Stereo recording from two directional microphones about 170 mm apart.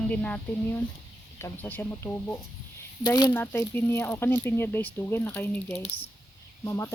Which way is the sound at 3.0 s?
25° left (ahead or behind).